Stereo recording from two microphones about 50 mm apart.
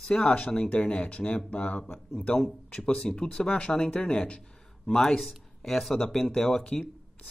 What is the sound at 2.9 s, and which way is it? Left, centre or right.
Speech, centre.